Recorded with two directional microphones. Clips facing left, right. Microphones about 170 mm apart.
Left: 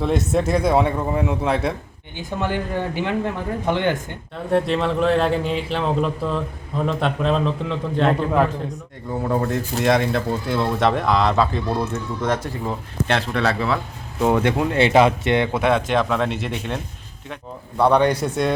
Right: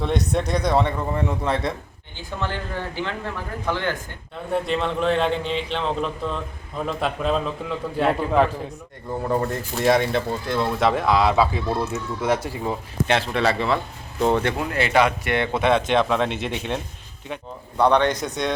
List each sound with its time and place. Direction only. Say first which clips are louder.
0.0 s speech: left 3 dB; 5° left (ahead or behind); by 3.9 s 20° left (ahead or behind)
4.5 s speech: left 4 dB; centre (ahead or behind)
14.5 s speech: left 4 dB; 25° left (ahead or behind)
15.5 s speech: even; 5° left (ahead or behind)
17.8 s speech: left 2 dB; 10° left (ahead or behind)